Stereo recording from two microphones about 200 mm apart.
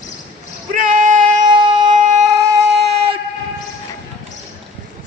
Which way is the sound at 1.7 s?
35° right (ahead or behind).